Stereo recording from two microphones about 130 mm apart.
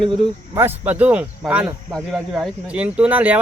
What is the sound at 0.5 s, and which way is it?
Speech, 15° right (ahead or behind).